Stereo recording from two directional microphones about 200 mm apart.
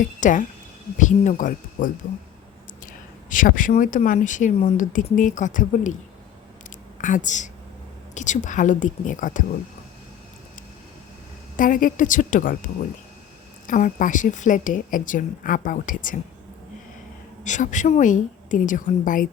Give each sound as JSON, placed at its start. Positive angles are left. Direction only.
{"t": 0.0, "sound": "speech", "side_deg": 40}
{"t": 7.0, "sound": "speech", "side_deg": 40}
{"t": 11.5, "sound": "a woman's voice", "side_deg": 40}
{"t": 13.7, "sound": "speech", "side_deg": 40}
{"t": 17.4, "sound": "speech", "side_deg": 40}